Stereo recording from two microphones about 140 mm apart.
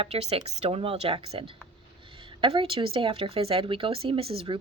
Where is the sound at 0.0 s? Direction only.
45° right (ahead or behind).